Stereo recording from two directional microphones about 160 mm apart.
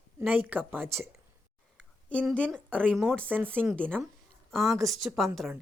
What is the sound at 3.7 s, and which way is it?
Speech, 5° left (ahead or behind).